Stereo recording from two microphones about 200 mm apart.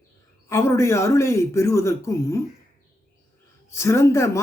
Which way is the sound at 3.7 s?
15° left (ahead or behind).